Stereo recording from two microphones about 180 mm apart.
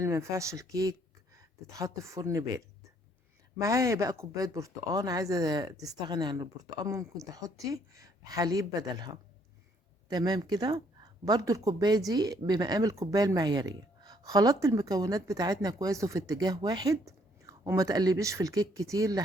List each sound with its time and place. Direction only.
0.0 s speech: 15° right (ahead or behind)
3.6 s speech: 15° right (ahead or behind)
10.1 s speech: 20° right (ahead or behind)